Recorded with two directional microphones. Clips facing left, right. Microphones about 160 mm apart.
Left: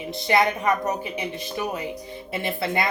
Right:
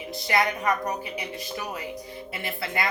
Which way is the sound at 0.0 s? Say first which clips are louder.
Left 4 dB; 25° left (ahead or behind).